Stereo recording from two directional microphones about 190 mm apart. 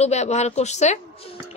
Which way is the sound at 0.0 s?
35° left (ahead or behind).